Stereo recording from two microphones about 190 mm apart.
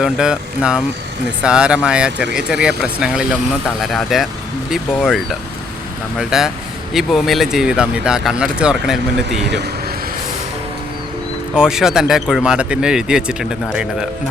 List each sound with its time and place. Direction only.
0.0 s speech: 5° right (ahead or behind)
9.4 s speech: 65° right (ahead or behind)
11.5 s speech: 5° right (ahead or behind)